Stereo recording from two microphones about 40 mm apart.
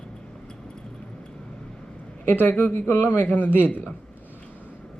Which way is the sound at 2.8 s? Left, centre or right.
Left.